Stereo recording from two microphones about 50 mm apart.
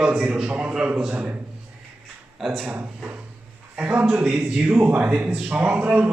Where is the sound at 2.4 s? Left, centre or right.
Centre.